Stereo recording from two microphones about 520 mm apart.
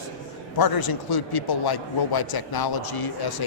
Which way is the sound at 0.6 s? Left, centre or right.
Left.